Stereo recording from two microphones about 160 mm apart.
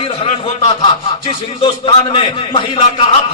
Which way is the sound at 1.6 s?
30° left (ahead or behind).